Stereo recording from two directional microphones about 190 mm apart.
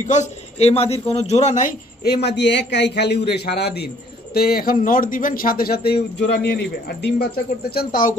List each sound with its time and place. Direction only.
0.0 s a man's voice: 40° left (ahead or behind)
2.0 s a man's voice: 60° left (ahead or behind)
7.7 s speech: 45° left (ahead or behind)